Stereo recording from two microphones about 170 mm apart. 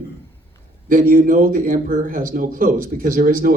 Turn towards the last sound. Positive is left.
turn(degrees=-55)  # may be behind; listen again after turning